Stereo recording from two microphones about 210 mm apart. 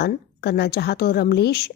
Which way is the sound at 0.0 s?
50° left (ahead or behind).